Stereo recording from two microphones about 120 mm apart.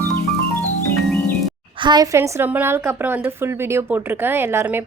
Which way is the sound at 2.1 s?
25° right (ahead or behind).